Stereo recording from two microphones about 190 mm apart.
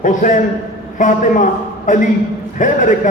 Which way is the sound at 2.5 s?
40° left (ahead or behind).